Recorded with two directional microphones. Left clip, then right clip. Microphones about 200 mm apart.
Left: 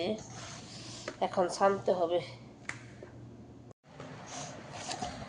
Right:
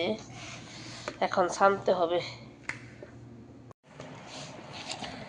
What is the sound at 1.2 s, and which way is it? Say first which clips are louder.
A woman's voice: right 4 dB; 10° right (ahead or behind).